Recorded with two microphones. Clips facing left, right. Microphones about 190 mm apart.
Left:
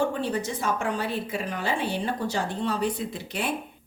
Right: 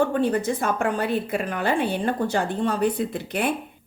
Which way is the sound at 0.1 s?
55° right (ahead or behind).